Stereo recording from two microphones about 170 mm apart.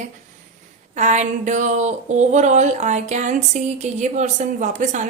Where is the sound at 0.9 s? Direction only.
45° right (ahead or behind).